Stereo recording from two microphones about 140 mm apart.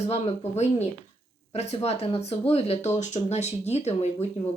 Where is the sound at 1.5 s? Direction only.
50° left (ahead or behind).